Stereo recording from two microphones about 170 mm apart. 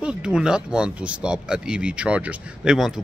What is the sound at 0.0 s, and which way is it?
Speech, 5° right (ahead or behind).